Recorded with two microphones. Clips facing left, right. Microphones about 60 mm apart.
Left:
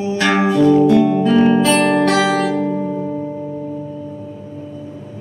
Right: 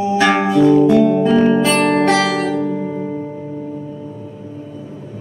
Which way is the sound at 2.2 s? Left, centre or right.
Centre.